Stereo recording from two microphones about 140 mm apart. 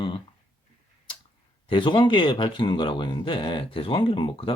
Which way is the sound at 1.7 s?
35° left (ahead or behind).